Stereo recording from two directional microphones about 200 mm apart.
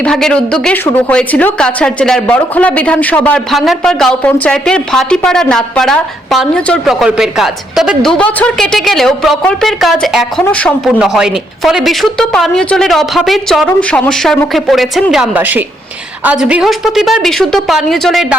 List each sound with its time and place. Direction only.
0.0 s a woman's voice: 5° left (ahead or behind)